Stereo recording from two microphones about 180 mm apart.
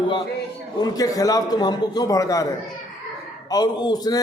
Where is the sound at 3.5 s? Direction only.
20° left (ahead or behind).